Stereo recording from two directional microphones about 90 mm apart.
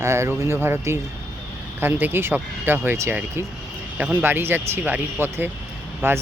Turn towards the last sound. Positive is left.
turn(degrees=-25)  # may be behind; listen again after turning